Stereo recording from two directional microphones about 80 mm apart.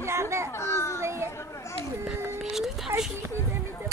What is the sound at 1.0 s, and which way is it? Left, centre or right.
Children playing, right.